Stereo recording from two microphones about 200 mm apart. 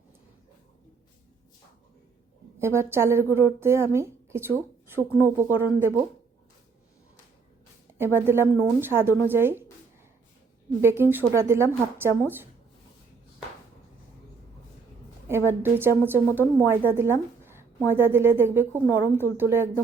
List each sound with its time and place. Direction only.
2.6 s a woman's voice: 10° right (ahead or behind)
7.9 s a woman's voice: 10° right (ahead or behind)
10.8 s a woman's voice: 10° right (ahead or behind)
15.3 s a woman's voice: 10° right (ahead or behind)